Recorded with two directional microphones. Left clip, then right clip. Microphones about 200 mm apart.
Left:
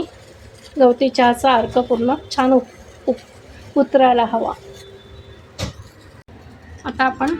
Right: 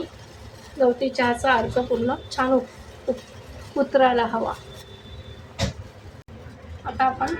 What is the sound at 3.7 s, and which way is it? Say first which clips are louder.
Speech: left 5 dB; 25° left (ahead or behind).